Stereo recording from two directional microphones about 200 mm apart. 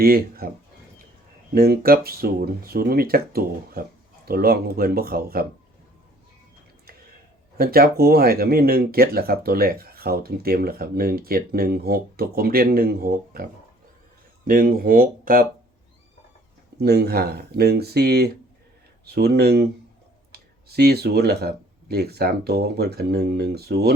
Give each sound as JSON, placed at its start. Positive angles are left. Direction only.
{"t": 0.0, "sound": "speech", "side_deg": -50}
{"t": 1.5, "sound": "speech", "side_deg": -50}
{"t": 7.5, "sound": "speech", "side_deg": -50}
{"t": 16.7, "sound": "speech", "side_deg": -55}